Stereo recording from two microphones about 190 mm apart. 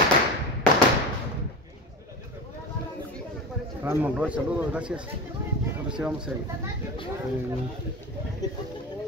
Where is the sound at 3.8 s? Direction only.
10° right (ahead or behind).